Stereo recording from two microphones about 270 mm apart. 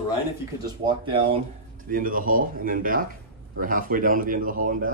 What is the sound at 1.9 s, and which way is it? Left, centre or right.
Speech, right.